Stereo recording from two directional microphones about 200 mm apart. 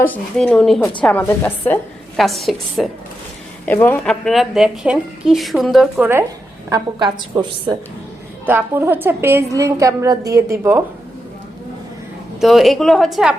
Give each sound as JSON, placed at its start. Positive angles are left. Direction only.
{"t": 0.0, "sound": "a woman's voice", "side_deg": 5}
{"t": 6.7, "sound": "a woman's voice", "side_deg": -20}
{"t": 8.4, "sound": "a woman's voice", "side_deg": -10}
{"t": 12.4, "sound": "a woman's voice", "side_deg": 0}